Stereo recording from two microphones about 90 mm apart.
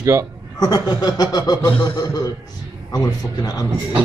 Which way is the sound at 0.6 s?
50° left (ahead or behind).